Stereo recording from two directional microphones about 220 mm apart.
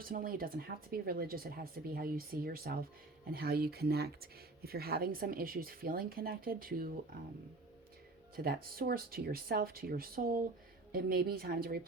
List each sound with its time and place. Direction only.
0.0 s speech: 40° right (ahead or behind)
8.4 s speech: 45° right (ahead or behind)